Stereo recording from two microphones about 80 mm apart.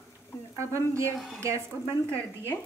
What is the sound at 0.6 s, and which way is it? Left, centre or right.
Speech, right.